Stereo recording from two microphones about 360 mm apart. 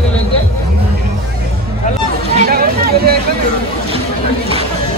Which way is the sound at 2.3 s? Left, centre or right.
Right.